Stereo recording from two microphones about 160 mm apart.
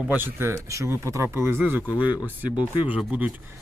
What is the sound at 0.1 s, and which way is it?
Speech, 15° right (ahead or behind).